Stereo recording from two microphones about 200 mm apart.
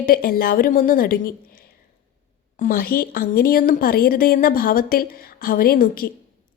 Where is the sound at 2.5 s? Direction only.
45° left (ahead or behind).